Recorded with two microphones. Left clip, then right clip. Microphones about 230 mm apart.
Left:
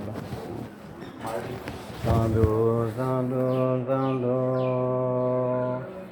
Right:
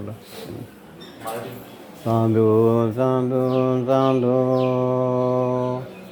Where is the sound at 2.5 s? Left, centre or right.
Right.